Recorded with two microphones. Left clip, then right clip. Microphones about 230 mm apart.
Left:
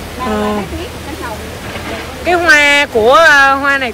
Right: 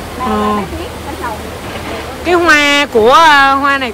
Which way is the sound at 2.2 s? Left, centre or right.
Centre.